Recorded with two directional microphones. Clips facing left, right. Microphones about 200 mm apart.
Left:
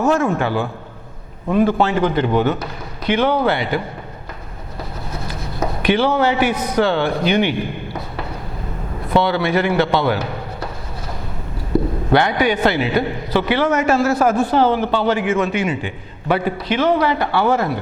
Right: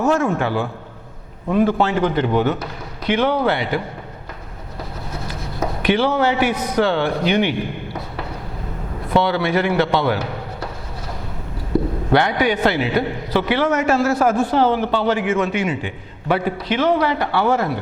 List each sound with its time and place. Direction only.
0.0 s a man's voice: 25° left (ahead or behind)
5.3 s a man's voice: 20° left (ahead or behind)
12.1 s a man's voice: 10° left (ahead or behind)